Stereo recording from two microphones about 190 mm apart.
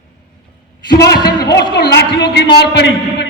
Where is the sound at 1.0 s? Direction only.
55° left (ahead or behind).